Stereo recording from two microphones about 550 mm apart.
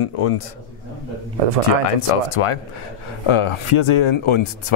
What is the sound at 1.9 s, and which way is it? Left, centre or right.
Speech, left.